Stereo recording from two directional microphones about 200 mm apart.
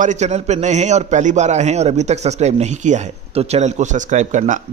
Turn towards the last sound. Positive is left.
turn(degrees=-40)  # may be behind; listen again after turning